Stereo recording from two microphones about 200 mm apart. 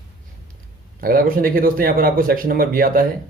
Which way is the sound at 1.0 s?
45° right (ahead or behind).